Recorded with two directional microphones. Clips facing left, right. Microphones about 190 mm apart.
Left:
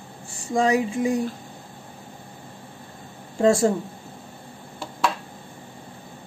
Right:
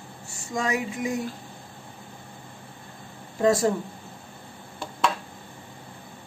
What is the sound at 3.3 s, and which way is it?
Speech, 25° left (ahead or behind).